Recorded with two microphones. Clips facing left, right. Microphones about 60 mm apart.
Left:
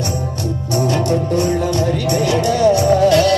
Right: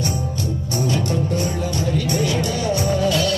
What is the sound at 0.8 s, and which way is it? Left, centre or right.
Music, left.